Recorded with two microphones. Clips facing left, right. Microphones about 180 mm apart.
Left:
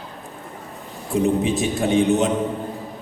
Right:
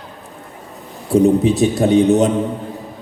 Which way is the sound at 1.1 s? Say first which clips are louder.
Right 7 dB; 35° right (ahead or behind).